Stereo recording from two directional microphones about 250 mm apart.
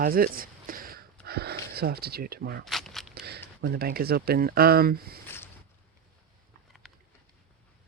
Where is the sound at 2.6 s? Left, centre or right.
Centre.